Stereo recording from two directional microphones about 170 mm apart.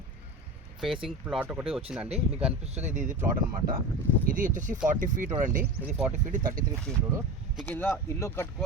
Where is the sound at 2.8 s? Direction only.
45° right (ahead or behind).